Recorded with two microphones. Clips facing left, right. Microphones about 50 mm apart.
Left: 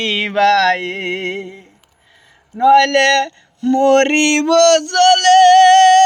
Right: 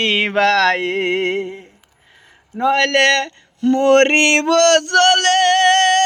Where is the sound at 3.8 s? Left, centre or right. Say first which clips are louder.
Even; right.